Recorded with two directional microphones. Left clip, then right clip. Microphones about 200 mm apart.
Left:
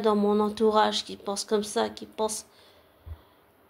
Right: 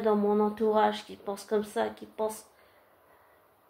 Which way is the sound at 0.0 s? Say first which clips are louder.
Left 2 dB; 45° left (ahead or behind).